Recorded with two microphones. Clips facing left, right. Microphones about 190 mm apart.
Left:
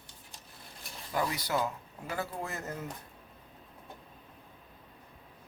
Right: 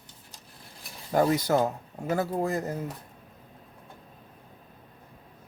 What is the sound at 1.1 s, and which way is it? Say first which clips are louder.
Speech: right 9 dB; 45° right (ahead or behind).